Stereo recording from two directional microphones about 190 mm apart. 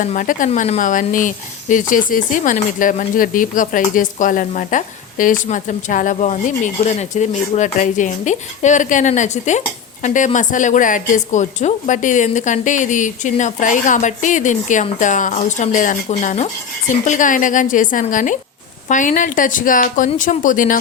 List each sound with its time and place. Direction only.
0.0 s speech: 45° left (ahead or behind)